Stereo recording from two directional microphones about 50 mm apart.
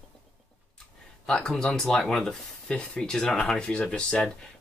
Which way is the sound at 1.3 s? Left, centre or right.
Centre.